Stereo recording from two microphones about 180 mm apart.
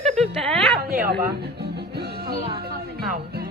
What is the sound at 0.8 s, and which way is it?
Music, 55° right (ahead or behind).